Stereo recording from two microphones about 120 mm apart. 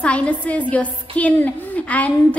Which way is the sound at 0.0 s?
10° left (ahead or behind).